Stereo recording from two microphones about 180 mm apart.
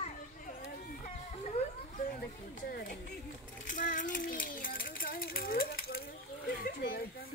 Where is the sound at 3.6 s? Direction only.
45° left (ahead or behind).